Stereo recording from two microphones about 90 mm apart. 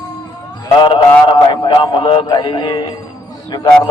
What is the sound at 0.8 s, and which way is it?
A man's voice, 60° left (ahead or behind).